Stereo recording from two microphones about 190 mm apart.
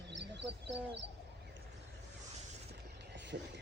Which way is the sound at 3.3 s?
55° right (ahead or behind).